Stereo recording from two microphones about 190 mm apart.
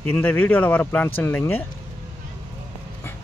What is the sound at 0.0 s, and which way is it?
Speech, 10° left (ahead or behind).